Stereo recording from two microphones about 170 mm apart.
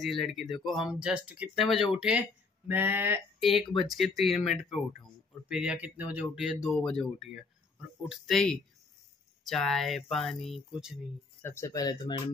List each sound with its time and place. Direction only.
0.0 s speech: centre (ahead or behind)
3.4 s speech: centre (ahead or behind)
11.4 s speech: 15° left (ahead or behind)